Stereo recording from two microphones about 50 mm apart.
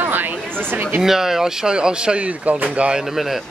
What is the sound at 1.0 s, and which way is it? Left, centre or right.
Speech, centre.